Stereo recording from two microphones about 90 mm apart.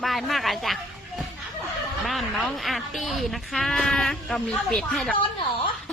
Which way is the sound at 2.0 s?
Centre (ahead or behind).